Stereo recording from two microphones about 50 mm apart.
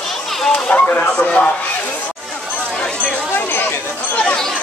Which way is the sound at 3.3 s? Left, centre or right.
Left.